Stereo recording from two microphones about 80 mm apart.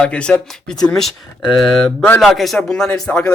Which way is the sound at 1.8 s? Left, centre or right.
Left.